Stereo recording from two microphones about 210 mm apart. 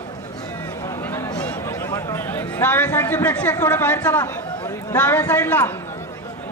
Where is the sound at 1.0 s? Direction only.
10° left (ahead or behind).